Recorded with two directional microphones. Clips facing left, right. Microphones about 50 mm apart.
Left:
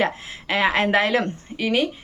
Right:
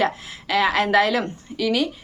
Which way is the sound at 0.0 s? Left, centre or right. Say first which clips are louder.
Right 1 dB; left.